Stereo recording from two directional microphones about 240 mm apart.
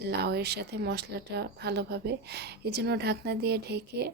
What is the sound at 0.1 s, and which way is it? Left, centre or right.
Speech, right.